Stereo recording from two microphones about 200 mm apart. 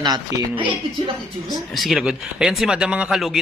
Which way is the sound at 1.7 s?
Centre (ahead or behind).